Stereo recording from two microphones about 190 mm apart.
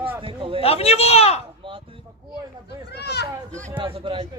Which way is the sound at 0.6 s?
30° left (ahead or behind).